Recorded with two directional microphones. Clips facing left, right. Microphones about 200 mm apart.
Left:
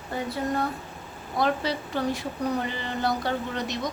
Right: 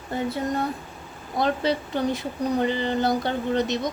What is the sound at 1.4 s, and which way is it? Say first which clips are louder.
A woman's voice: right 3 dB; 20° right (ahead or behind).